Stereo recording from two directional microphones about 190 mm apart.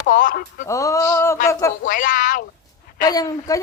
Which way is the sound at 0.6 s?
15° left (ahead or behind).